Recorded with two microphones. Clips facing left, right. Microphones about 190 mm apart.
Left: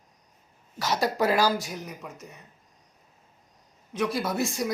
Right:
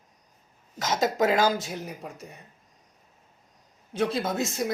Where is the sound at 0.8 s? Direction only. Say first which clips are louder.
Right 1 dB; 20° right (ahead or behind).